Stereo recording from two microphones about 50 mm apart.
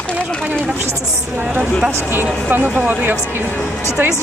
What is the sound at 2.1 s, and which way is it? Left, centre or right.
Speech, right.